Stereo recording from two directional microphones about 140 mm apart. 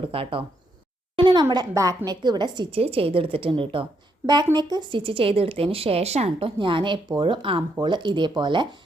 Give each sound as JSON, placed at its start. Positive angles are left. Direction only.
{"t": 0.1, "sound": "a woman's voice", "side_deg": -40}